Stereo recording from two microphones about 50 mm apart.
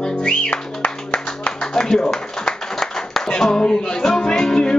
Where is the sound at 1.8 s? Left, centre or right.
Centre.